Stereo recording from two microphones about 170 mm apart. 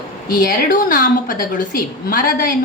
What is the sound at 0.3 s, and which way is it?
A woman's voice, 55° left (ahead or behind).